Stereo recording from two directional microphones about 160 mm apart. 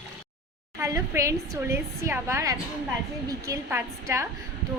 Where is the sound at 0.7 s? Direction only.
15° right (ahead or behind).